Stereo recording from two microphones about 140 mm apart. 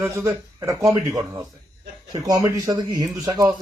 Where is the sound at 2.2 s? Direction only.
25° right (ahead or behind).